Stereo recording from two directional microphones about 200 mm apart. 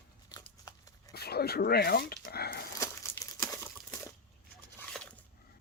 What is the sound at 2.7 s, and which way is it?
Crumpling, 15° left (ahead or behind).